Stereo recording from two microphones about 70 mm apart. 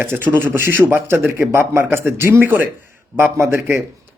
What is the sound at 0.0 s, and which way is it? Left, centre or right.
A man's voice, right.